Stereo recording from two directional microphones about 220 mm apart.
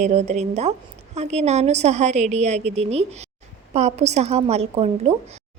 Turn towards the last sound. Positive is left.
turn(degrees=-25)  # may be behind; listen again after turning